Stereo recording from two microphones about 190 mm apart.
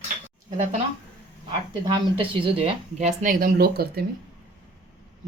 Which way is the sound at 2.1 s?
30° right (ahead or behind).